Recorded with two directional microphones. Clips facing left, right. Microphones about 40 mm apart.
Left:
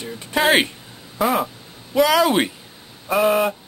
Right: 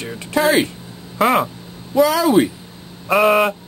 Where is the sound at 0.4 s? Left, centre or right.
Left.